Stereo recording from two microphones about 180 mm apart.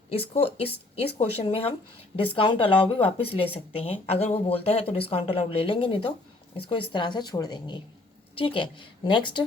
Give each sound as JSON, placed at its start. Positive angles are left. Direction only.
{"t": 0.1, "sound": "a woman's voice", "side_deg": 35}